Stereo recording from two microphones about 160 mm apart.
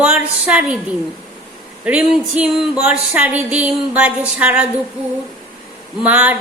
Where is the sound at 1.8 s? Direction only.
5° right (ahead or behind).